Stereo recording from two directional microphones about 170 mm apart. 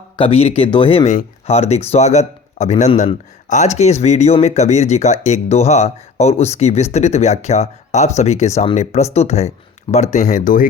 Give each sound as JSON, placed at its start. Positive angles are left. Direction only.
{"t": 0.2, "sound": "speech", "side_deg": 35}